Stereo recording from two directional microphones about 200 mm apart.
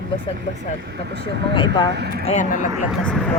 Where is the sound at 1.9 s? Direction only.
55° right (ahead or behind).